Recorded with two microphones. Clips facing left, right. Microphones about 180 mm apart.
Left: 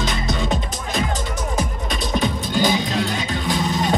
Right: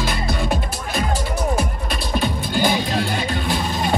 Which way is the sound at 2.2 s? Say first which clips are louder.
Even; 60° right (ahead or behind).